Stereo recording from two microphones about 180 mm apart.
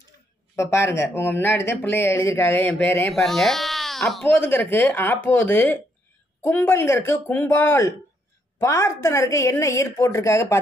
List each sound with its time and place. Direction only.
0.6 s speech: 15° left (ahead or behind)
4.3 s speech: 10° left (ahead or behind)